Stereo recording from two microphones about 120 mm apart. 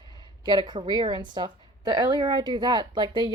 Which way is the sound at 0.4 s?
35° right (ahead or behind).